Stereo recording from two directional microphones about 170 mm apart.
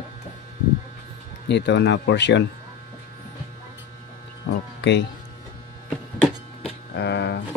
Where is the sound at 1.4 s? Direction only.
90° left.